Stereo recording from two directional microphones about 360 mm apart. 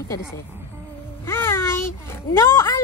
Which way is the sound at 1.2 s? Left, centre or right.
Centre.